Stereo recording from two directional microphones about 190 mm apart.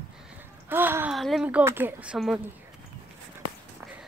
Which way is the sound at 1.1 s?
Centre (ahead or behind).